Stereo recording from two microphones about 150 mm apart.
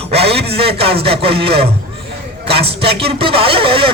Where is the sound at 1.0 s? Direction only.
40° right (ahead or behind).